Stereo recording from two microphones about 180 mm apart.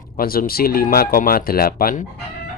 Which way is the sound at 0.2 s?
55° left (ahead or behind).